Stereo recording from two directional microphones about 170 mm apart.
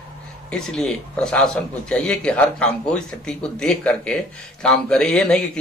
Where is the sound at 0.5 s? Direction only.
5° left (ahead or behind).